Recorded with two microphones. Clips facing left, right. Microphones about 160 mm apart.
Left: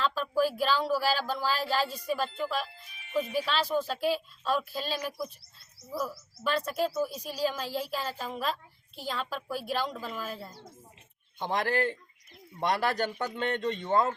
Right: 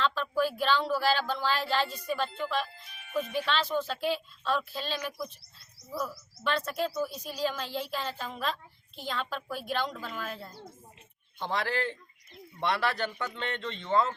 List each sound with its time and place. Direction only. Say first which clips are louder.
0.0 s a sound: even; 5° left (ahead or behind)
0.3 s speech: left 3 dB; 35° left (ahead or behind)
0.6 s a woman's voice: even; 5° left (ahead or behind)
11.5 s a man's voice: left 3 dB; 50° left (ahead or behind)